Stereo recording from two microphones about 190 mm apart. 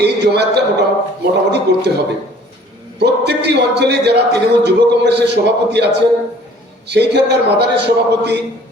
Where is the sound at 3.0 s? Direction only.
60° right (ahead or behind).